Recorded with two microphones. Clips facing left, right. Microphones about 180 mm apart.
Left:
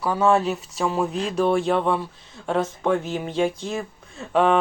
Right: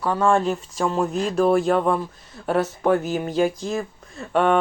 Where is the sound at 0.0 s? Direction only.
5° left (ahead or behind).